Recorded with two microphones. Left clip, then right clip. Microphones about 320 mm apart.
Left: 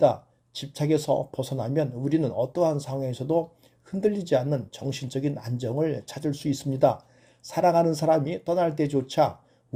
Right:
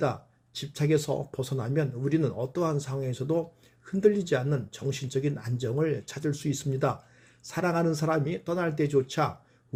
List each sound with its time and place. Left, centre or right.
0.0 s speech: centre